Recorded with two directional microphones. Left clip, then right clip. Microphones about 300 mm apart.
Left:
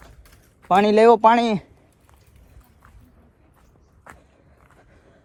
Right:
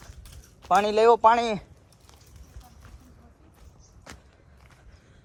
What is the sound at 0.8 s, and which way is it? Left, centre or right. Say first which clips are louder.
Speech: left 5 dB; left.